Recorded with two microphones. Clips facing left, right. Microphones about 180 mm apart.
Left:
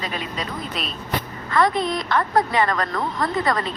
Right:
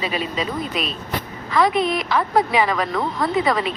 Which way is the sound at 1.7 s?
20° right (ahead or behind).